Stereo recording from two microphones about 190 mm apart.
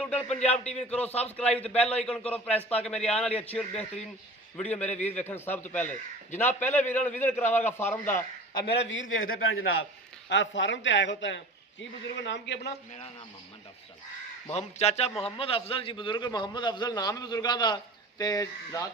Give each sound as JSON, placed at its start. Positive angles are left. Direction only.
{"t": 0.0, "sound": "a sound", "side_deg": 5}
{"t": 0.3, "sound": "a man's voice", "side_deg": 35}
{"t": 0.8, "sound": "a man's voice", "side_deg": 5}
{"t": 8.6, "sound": "a man's voice", "side_deg": 65}
{"t": 10.2, "sound": "speech", "side_deg": 70}
{"t": 14.5, "sound": "a man's voice", "side_deg": 35}